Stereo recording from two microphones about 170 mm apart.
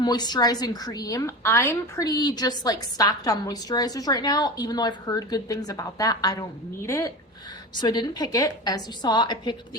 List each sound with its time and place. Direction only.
0.0 s a woman's voice: 25° left (ahead or behind)